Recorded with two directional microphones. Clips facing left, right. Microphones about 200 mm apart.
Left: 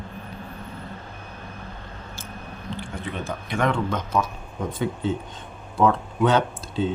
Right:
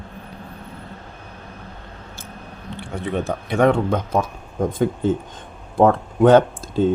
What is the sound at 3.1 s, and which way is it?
Speech, 65° right (ahead or behind).